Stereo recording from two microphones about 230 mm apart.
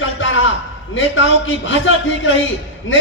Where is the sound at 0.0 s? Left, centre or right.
Left.